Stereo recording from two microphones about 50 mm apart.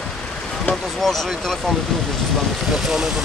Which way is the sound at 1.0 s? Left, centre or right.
Centre.